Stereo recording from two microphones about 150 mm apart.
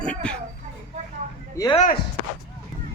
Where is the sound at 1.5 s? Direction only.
20° left (ahead or behind).